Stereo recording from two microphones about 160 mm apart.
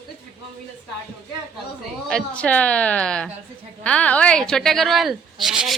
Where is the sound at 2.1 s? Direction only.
10° left (ahead or behind).